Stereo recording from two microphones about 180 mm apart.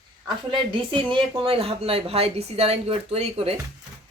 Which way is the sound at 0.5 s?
25° right (ahead or behind).